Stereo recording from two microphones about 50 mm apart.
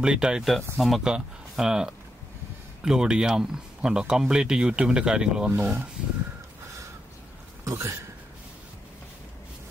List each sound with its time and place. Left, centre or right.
0.0 s speech: centre
0.4 s speech: centre
1.0 s speech: centre
5.6 s speech: right
7.6 s speech: right